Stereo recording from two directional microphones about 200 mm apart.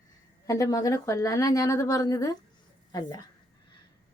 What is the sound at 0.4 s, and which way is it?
A woman's voice, 15° left (ahead or behind).